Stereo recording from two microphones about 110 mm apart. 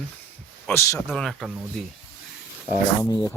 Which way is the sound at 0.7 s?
25° left (ahead or behind).